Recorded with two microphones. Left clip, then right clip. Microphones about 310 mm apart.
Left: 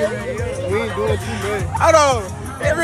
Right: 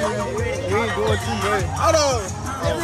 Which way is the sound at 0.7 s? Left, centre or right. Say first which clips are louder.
Left 1 dB; right.